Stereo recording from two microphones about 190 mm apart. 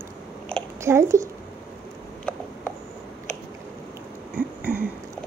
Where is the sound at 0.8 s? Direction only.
15° right (ahead or behind).